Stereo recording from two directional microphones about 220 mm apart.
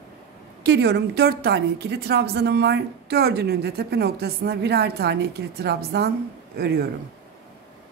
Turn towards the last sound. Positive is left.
turn(degrees=-45)  # may be behind; listen again after turning